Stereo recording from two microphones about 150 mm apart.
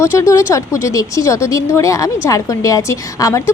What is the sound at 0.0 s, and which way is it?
Speech, 20° left (ahead or behind).